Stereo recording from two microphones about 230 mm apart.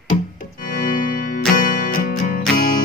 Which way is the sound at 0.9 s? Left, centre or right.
Left.